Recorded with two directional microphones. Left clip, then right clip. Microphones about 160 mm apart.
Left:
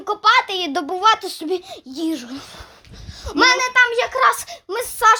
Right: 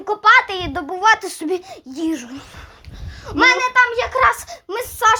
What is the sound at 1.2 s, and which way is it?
A child's voice, centre (ahead or behind).